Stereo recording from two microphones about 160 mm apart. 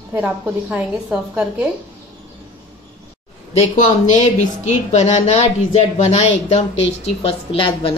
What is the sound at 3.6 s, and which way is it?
A woman's voice, 50° left (ahead or behind).